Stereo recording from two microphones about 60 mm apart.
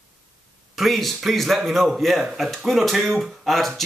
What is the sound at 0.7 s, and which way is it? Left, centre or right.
Speech, centre.